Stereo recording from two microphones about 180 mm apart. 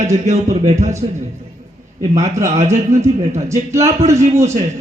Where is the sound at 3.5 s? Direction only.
15° right (ahead or behind).